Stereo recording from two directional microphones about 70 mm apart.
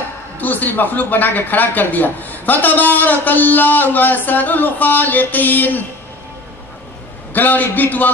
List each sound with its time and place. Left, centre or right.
0.4 s a man's voice: left
7.3 s a man's voice: left